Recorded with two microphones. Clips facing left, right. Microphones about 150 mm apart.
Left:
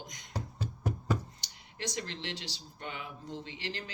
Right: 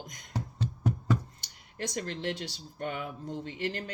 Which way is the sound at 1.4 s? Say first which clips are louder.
Right 3 dB; 50° right (ahead or behind).